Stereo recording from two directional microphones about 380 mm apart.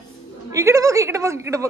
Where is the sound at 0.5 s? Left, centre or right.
Centre.